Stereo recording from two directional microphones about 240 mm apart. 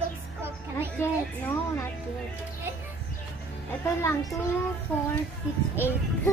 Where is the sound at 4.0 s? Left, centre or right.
Centre.